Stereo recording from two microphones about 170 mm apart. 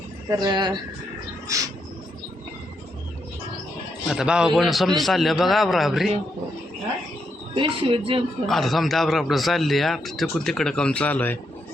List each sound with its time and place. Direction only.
0.3 s speech: 20° right (ahead or behind)
1.5 s a sound: 20° right (ahead or behind)
4.0 s speech: 5° right (ahead or behind)
7.5 s speech: 30° right (ahead or behind)
8.4 s speech: centre (ahead or behind)